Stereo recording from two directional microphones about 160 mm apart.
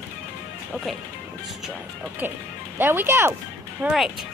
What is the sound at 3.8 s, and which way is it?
Speech, centre (ahead or behind).